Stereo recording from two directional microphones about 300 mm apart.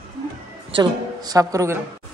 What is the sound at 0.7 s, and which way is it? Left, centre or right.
A woman's voice, centre.